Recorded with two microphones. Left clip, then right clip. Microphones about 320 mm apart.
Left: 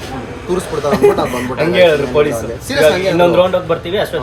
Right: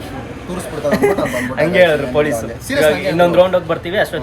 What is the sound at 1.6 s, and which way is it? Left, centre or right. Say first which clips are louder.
A man's voice: left 1 dB; centre.